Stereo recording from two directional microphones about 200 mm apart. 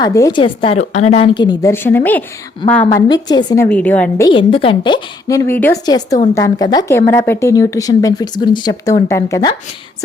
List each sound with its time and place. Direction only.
0.0 s a woman's voice: 15° left (ahead or behind)
2.9 s a woman's voice: 20° left (ahead or behind)
3.7 s speech: 5° left (ahead or behind)
4.3 s a woman's voice: 25° left (ahead or behind)